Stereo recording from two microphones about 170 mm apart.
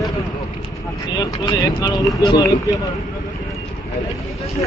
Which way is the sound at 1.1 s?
25° left (ahead or behind).